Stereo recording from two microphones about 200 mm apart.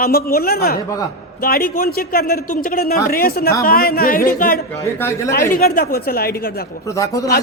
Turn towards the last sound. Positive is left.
turn(degrees=15)  # may be behind; listen again after turning